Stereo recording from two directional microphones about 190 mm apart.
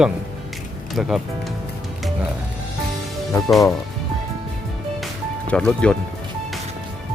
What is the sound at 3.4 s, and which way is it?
Speech, centre (ahead or behind).